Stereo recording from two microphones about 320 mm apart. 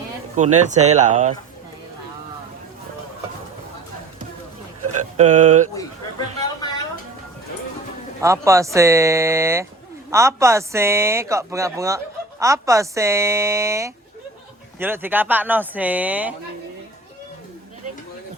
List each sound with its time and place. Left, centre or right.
0.3 s speech: right
5.1 s speech: right
8.2 s speech: centre